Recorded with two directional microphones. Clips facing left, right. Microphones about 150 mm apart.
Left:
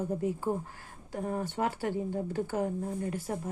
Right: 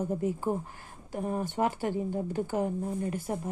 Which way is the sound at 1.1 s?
20° right (ahead or behind).